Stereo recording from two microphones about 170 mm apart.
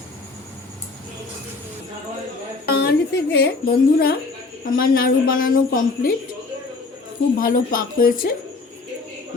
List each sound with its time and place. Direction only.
2.6 s speech: 70° left (ahead or behind)
7.3 s speech: 55° left (ahead or behind)